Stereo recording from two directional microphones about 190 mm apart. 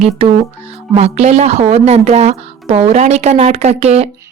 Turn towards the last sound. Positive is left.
turn(degrees=-35)  # may be behind; listen again after turning